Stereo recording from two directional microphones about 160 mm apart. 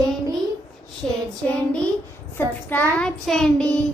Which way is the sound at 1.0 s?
5° left (ahead or behind).